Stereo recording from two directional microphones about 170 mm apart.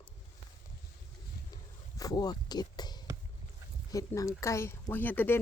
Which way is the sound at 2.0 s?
20° left (ahead or behind).